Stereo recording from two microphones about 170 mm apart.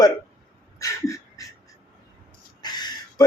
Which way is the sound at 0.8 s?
20° left (ahead or behind).